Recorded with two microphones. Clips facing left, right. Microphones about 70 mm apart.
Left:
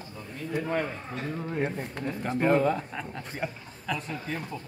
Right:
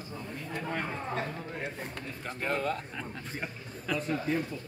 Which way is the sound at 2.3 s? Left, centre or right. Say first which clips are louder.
Left 9 dB; left.